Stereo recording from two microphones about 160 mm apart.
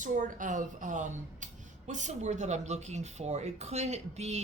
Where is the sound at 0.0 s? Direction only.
55° right (ahead or behind).